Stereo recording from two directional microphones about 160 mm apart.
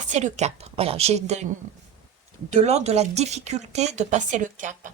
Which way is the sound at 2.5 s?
45° right (ahead or behind).